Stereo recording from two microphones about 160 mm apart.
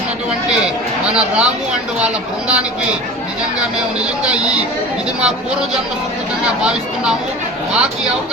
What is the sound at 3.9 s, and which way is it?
Speech, 5° right (ahead or behind).